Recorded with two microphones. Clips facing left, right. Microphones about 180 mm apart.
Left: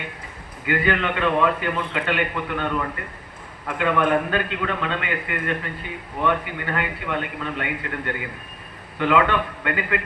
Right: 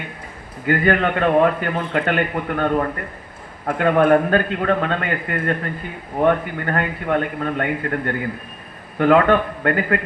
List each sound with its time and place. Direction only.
0.6 s a man's voice: 45° right (ahead or behind)